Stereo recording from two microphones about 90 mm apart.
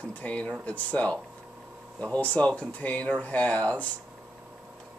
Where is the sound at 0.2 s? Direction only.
15° left (ahead or behind).